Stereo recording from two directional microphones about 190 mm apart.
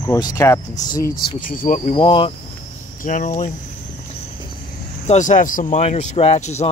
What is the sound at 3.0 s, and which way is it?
Speech, 45° left (ahead or behind).